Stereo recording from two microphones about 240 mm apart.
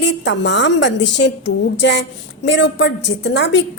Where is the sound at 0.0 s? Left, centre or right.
Left.